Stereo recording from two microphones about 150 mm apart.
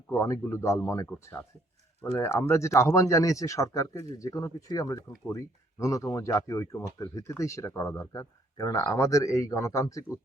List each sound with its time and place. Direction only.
0.1 s speech: 20° left (ahead or behind)